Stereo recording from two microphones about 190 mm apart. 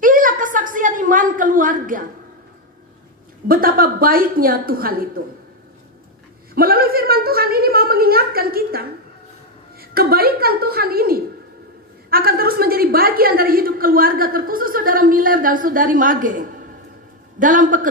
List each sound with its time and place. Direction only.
0.0 s a sound: 45° right (ahead or behind)
3.4 s a woman's voice: 50° right (ahead or behind)
6.5 s a woman's voice: 50° right (ahead or behind)